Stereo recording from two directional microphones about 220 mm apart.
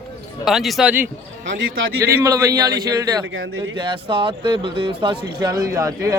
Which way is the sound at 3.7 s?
20° right (ahead or behind).